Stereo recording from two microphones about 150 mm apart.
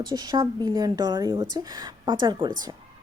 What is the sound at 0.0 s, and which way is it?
A woman's voice, 25° right (ahead or behind).